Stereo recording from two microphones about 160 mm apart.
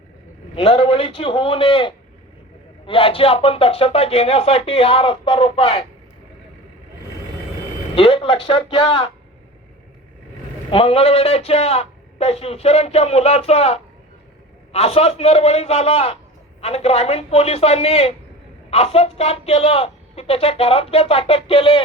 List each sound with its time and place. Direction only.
0.5 s a man's voice: 40° left (ahead or behind)
7.9 s a man's voice: 35° left (ahead or behind)
10.7 s a man's voice: 35° left (ahead or behind)